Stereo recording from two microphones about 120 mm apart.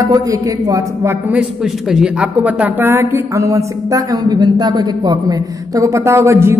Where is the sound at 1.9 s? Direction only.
5° right (ahead or behind).